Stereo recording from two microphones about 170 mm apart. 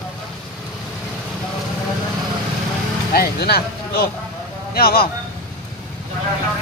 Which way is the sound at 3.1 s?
65° left (ahead or behind).